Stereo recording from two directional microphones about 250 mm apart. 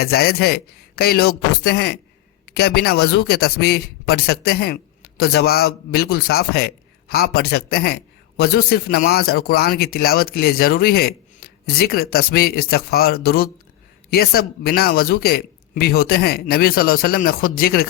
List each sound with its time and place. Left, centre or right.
0.0 s a man's voice: left